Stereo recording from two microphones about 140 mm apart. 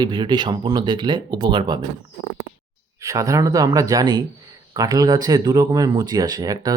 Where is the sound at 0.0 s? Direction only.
30° right (ahead or behind).